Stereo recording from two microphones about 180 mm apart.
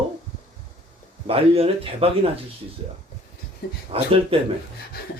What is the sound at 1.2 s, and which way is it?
Speech, 35° right (ahead or behind).